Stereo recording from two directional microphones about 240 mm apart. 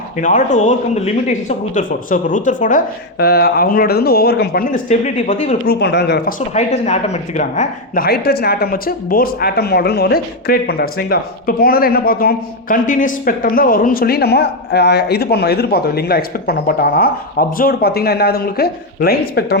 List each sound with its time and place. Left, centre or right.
0.2 s speech: left
5.8 s speech: left
6.5 s speech: left